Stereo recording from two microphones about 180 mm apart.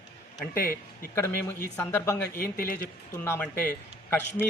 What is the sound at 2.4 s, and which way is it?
Speech, 55° left (ahead or behind).